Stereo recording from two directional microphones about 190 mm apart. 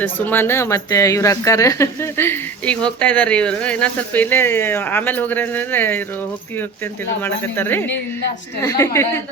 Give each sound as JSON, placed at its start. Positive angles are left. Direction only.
{"t": 0.0, "sound": "speech", "side_deg": 10}
{"t": 7.2, "sound": "speech", "side_deg": 10}